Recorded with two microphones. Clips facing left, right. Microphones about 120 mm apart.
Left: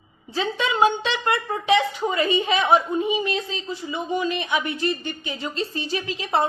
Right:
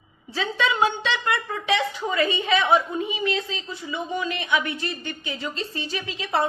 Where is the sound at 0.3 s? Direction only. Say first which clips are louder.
Left 1 dB; 25° left (ahead or behind).